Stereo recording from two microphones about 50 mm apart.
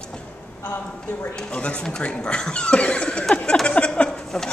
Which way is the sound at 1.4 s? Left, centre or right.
Left.